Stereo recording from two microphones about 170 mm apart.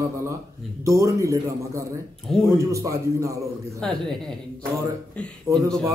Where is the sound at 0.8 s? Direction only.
15° right (ahead or behind).